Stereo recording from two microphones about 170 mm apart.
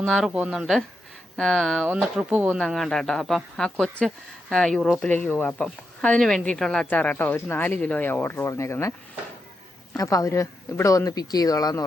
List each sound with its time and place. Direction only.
0.3 s speech: 5° right (ahead or behind); by 8.9 s 15° left (ahead or behind)
10.0 s speech: 20° left (ahead or behind)